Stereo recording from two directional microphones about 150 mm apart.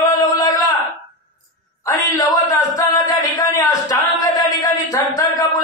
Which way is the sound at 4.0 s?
25° left (ahead or behind).